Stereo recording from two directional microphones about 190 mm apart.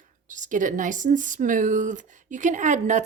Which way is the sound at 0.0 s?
40° right (ahead or behind).